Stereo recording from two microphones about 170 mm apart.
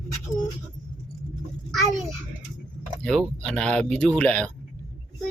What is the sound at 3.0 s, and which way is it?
Speech, 5° left (ahead or behind).